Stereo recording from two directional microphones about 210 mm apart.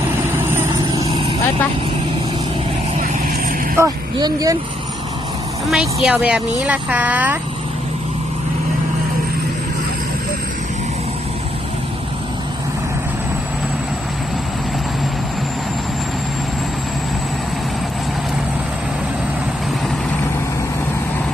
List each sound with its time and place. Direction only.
0.5 s vehicle: 15° right (ahead or behind)
3.8 s speech: 15° right (ahead or behind)
5.6 s speech: centre (ahead or behind)